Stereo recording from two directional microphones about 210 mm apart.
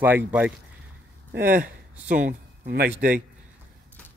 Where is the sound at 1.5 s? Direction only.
35° right (ahead or behind).